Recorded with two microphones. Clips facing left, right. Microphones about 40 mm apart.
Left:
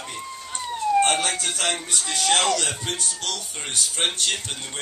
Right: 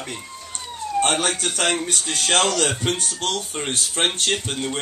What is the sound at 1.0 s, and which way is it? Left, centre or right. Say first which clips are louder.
Speech: right 2 dB; right.